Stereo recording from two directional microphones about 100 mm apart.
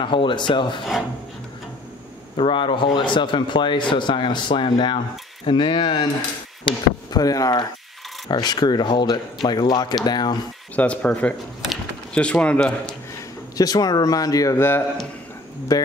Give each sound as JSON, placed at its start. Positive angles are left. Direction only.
{"t": 0.0, "sound": "speech", "side_deg": 55}
{"t": 2.3, "sound": "speech", "side_deg": 60}
{"t": 6.6, "sound": "speech", "side_deg": 40}
{"t": 10.8, "sound": "a man's voice", "side_deg": 15}
{"t": 13.6, "sound": "speech", "side_deg": 40}
{"t": 14.6, "sound": "a man's voice", "side_deg": 25}
{"t": 15.7, "sound": "speech", "side_deg": 35}